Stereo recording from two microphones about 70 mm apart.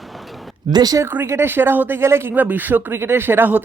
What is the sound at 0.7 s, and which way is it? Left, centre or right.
Speech, right.